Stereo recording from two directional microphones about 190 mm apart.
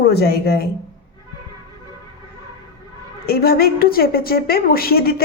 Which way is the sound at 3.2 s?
55° left (ahead or behind).